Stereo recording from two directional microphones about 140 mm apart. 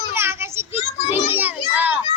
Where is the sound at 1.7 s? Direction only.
15° right (ahead or behind).